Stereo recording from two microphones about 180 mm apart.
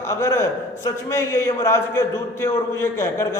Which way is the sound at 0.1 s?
15° left (ahead or behind).